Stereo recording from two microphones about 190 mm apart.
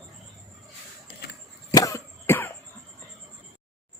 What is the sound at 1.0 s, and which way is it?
Vehicle, 55° left (ahead or behind).